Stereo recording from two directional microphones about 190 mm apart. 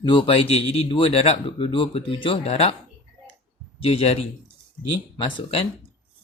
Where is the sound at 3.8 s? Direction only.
30° left (ahead or behind).